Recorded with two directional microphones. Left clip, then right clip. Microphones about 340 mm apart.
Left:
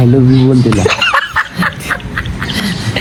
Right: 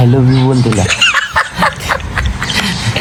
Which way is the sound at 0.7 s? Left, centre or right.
Centre.